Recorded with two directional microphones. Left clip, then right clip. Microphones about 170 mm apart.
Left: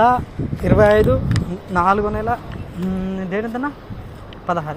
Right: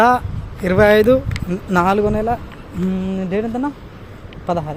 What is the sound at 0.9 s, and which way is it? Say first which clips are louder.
Speech: right 3 dB; 45° right (ahead or behind).